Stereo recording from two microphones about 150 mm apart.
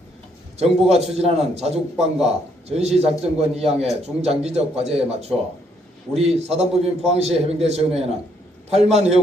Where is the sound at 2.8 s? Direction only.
45° right (ahead or behind).